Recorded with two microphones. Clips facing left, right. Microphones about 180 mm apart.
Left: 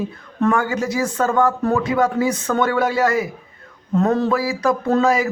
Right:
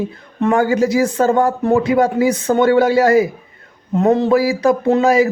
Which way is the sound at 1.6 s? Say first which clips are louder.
Right 4 dB; 20° right (ahead or behind).